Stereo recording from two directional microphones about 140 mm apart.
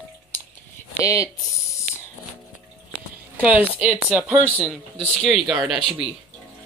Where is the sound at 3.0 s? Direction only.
10° right (ahead or behind).